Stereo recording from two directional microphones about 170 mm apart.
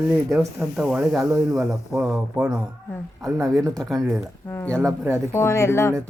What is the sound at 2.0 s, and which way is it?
Speech, 5° right (ahead or behind).